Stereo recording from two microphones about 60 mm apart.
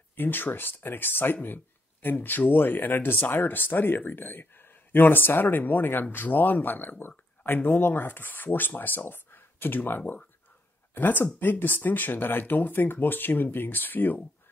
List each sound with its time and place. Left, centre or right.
0.1 s speech: left